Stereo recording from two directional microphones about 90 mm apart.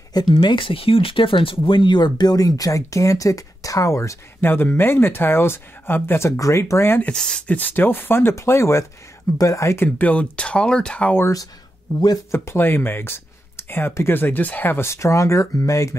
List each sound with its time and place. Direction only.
0.1 s speech: 55° left (ahead or behind); by 4.2 s 35° left (ahead or behind)
4.4 s speech: 25° left (ahead or behind)
7.1 s speech: 10° left (ahead or behind); by 9.8 s 35° left (ahead or behind)
9.9 s speech: 15° left (ahead or behind)
12.3 s speech: 25° left (ahead or behind)